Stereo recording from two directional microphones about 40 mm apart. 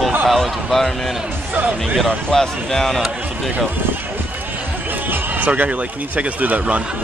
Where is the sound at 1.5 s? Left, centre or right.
Right.